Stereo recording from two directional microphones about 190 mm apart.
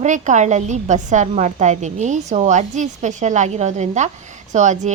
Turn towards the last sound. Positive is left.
turn(degrees=-40)  # may be behind; listen again after turning